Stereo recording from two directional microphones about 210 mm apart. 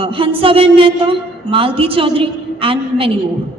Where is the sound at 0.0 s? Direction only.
25° right (ahead or behind).